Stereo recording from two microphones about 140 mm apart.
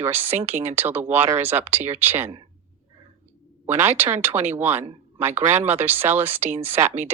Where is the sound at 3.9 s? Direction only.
15° right (ahead or behind).